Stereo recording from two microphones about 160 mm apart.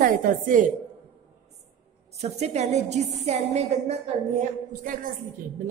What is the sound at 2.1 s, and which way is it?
A woman's voice, 45° right (ahead or behind).